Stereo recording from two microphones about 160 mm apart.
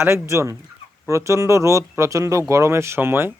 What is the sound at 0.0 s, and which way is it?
Speech, 15° right (ahead or behind).